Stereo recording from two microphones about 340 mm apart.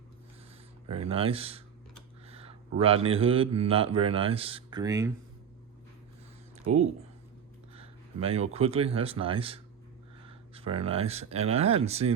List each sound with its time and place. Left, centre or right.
0.9 s a man's voice: centre
6.7 s speech: right
7.7 s speech: centre